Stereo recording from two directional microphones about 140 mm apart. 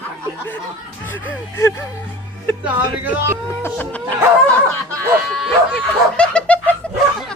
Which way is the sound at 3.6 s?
10° left (ahead or behind).